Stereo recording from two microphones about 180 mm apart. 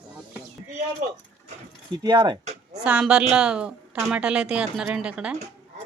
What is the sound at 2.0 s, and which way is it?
Speech, 25° right (ahead or behind).